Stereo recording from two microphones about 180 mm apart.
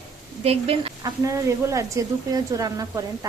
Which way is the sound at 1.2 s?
15° right (ahead or behind).